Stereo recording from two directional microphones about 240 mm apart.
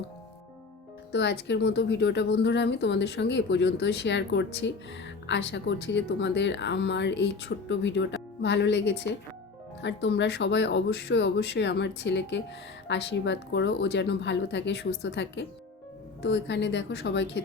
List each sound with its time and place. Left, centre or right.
1.1 s speech: left